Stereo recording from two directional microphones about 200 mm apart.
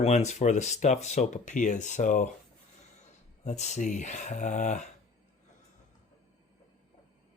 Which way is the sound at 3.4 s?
35° left (ahead or behind).